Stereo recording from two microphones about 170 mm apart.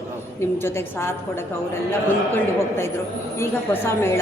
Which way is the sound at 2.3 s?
15° left (ahead or behind).